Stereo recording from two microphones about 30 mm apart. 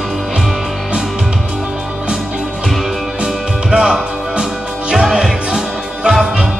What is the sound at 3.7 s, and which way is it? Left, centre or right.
Music, right.